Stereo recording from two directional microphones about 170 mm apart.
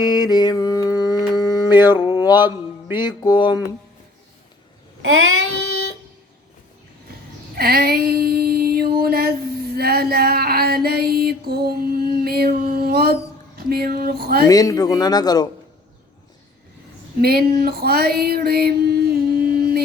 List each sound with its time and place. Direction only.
0.0 s mantra: 25° left (ahead or behind)
2.9 s a man's voice: 25° left (ahead or behind)
7.5 s a sound: 65° right (ahead or behind)
9.7 s female singing: 65° right (ahead or behind)
13.7 s a sound: 65° right (ahead or behind)
14.4 s a man's voice: 20° left (ahead or behind)
17.2 s female singing: 65° right (ahead or behind)